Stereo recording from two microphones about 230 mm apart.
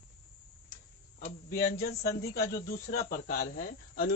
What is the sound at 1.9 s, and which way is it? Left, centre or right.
Speech, left.